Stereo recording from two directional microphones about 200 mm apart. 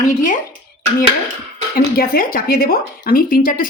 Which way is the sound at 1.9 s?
45° left (ahead or behind).